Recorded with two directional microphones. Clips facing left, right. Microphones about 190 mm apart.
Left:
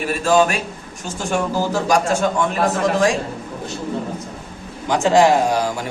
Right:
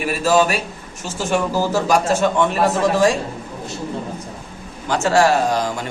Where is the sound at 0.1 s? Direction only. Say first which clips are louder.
Even; 5° right (ahead or behind).